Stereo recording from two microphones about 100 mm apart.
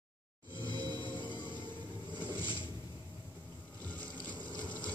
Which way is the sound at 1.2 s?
55° left (ahead or behind).